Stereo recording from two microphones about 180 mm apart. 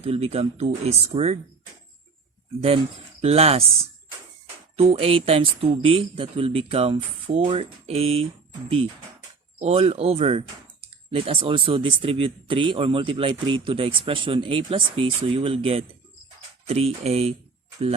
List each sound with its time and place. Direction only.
0.0 s speech: 35° right (ahead or behind)
2.6 s speech: 35° right (ahead or behind)
4.8 s speech: 35° right (ahead or behind)
9.6 s speech: 35° right (ahead or behind)